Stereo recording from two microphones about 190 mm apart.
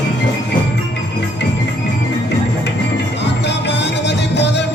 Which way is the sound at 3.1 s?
65° left (ahead or behind).